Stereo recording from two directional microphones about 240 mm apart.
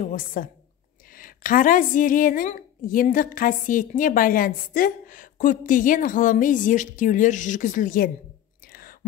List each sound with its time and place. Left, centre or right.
0.0 s a woman's voice: left